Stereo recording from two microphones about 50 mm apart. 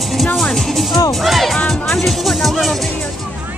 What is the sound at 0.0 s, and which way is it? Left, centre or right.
Music, centre.